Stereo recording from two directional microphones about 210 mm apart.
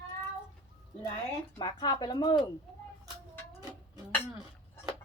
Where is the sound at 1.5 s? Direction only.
20° left (ahead or behind).